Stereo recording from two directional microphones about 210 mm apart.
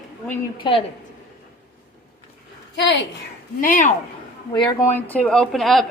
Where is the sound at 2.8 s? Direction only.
55° left (ahead or behind).